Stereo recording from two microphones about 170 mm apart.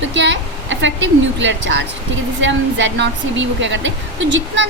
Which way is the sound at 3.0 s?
90° right.